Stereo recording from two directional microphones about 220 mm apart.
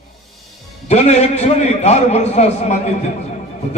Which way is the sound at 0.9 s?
30° left (ahead or behind).